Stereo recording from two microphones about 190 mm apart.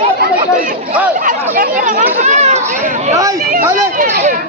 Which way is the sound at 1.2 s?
45° right (ahead or behind).